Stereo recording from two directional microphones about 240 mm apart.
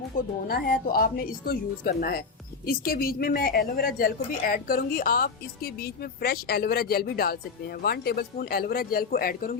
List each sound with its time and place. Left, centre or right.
0.4 s a woman's voice: left